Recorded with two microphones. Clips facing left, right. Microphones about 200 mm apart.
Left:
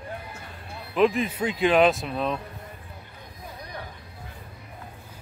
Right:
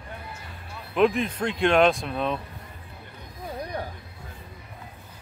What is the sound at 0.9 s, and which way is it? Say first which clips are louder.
Speech: even; centre (ahead or behind).